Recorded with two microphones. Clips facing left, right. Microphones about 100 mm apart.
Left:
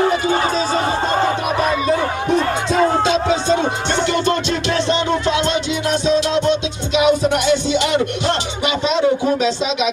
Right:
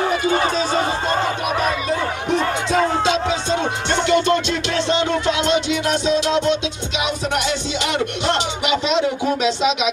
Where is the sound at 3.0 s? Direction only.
35° left (ahead or behind).